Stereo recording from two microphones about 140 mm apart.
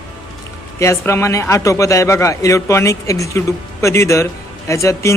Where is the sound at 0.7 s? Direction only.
20° left (ahead or behind).